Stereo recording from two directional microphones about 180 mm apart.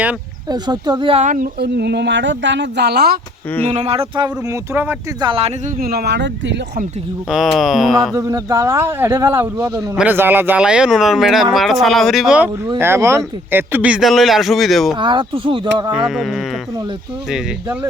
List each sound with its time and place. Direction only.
0.5 s speech: 25° right (ahead or behind)
1.2 s speech: 45° right (ahead or behind)
1.5 s speech: 65° right (ahead or behind)
3.7 s speech: 35° right (ahead or behind)
4.7 s speech: 10° right (ahead or behind)
5.2 s speech: 30° right (ahead or behind)
5.8 s speech: 60° right (ahead or behind)
7.3 s speech: centre (ahead or behind)
8.1 s speech: 15° right (ahead or behind)
12.6 s speech: 15° right (ahead or behind)
14.9 s speech: 25° right (ahead or behind)
16.0 s speech: centre (ahead or behind)